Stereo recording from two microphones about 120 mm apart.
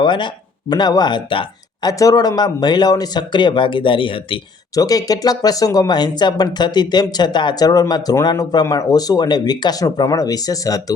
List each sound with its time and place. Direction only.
0.0 s speech: 40° left (ahead or behind)
1.9 s speech: 30° left (ahead or behind)
4.7 s speech: 30° left (ahead or behind)